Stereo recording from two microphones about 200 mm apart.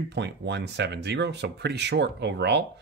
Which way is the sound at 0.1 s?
60° right (ahead or behind).